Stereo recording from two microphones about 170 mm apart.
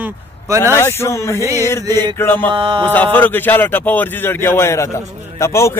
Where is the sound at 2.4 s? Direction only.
30° right (ahead or behind).